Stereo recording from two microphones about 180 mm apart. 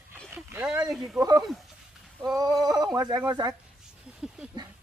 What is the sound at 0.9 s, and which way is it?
Speech, centre (ahead or behind).